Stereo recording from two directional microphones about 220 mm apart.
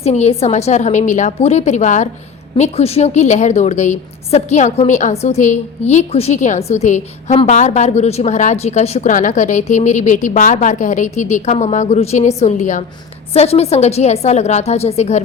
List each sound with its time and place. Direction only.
0.0 s a woman's voice: 30° left (ahead or behind)